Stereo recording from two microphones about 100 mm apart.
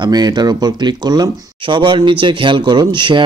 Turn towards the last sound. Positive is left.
turn(degrees=-50)  # may be behind; listen again after turning